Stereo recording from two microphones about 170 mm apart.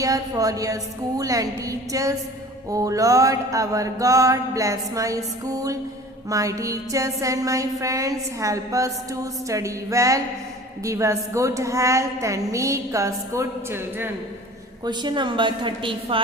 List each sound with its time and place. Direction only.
0.0 s mantra: 20° right (ahead or behind)
10.8 s a woman's voice: 20° right (ahead or behind)
14.8 s mantra: 25° right (ahead or behind)